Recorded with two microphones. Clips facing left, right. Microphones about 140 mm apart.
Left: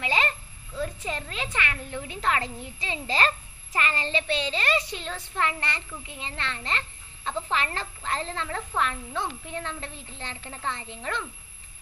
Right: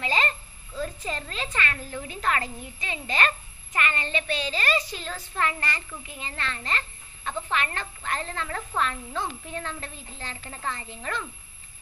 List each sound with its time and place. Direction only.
0.0 s a sound: 15° left (ahead or behind)
2.0 s a child's voice: 20° left (ahead or behind)
7.2 s speech: centre (ahead or behind)
7.5 s a child's voice: 30° left (ahead or behind)
10.3 s a woman's voice: 10° left (ahead or behind)